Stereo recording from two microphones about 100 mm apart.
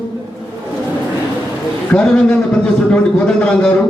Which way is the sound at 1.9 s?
10° left (ahead or behind).